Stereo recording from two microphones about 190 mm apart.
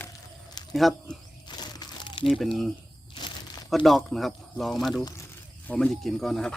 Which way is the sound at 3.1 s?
20° left (ahead or behind).